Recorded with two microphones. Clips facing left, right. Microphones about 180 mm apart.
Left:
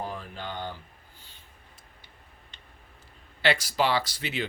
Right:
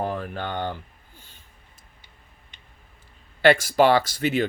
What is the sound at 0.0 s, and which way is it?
Speech, 65° right (ahead or behind).